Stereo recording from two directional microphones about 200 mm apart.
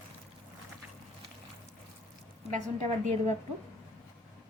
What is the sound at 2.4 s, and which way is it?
Speech, 35° right (ahead or behind).